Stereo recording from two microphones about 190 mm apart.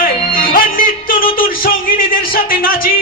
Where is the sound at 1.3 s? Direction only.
50° left (ahead or behind).